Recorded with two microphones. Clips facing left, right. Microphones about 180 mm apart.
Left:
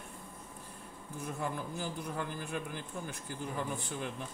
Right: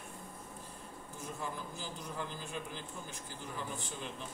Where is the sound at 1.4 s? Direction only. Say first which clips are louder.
Left 6 dB; 55° left (ahead or behind).